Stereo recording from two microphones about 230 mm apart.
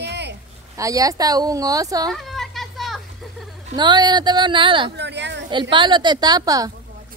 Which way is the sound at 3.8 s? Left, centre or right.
Centre.